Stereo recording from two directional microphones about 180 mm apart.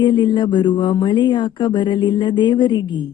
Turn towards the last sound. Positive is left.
turn(degrees=25)  # may be behind; listen again after turning